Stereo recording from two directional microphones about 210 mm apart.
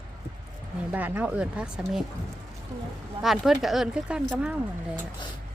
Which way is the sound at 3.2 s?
Centre (ahead or behind).